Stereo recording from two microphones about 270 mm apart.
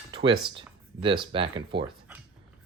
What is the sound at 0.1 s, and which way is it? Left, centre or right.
Speech, centre.